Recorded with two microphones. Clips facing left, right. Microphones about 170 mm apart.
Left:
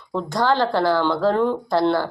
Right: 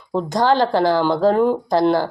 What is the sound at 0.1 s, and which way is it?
Speech, 20° right (ahead or behind).